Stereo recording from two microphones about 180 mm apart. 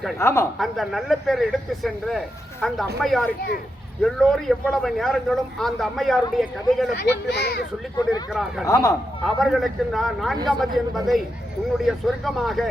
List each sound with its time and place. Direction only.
0.2 s speech: 15° left (ahead or behind)
0.6 s speech: centre (ahead or behind)
7.0 s a child's voice: 65° left (ahead or behind)
8.3 s speech: centre (ahead or behind)
8.6 s speech: 15° left (ahead or behind)
9.2 s speech: centre (ahead or behind)